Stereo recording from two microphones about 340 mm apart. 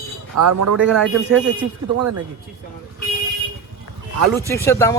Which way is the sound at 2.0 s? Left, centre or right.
Right.